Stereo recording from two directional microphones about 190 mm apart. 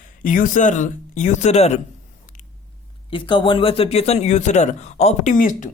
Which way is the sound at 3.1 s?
25° left (ahead or behind).